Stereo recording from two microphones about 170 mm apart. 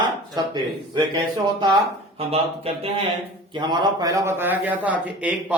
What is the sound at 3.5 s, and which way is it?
A man's voice, 25° right (ahead or behind).